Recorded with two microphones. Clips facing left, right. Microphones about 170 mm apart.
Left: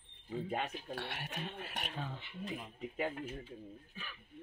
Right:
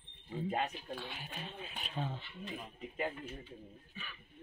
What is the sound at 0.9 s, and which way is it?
Speech, 75° left (ahead or behind).